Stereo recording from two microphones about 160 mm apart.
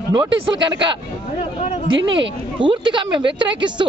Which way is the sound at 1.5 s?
40° left (ahead or behind).